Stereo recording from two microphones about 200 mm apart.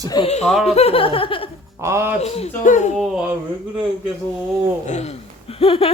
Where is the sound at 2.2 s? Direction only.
30° left (ahead or behind).